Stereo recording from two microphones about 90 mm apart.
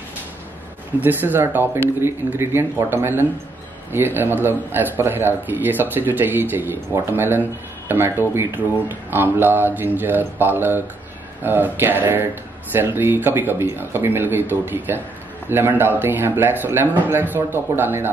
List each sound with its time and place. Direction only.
1.0 s speech: 20° right (ahead or behind)